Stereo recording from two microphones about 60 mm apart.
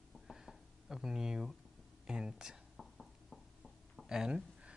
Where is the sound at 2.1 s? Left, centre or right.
Centre.